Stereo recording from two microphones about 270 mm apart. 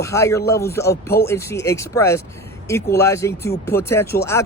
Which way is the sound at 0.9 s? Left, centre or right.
Left.